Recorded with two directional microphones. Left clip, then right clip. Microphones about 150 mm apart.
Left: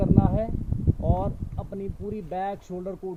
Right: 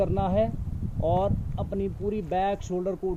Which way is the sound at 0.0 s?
20° right (ahead or behind).